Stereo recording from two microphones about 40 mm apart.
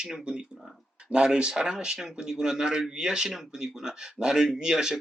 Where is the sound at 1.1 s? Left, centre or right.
Right.